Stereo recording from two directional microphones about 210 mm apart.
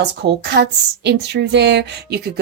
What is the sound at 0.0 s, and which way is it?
A woman's voice, 50° right (ahead or behind).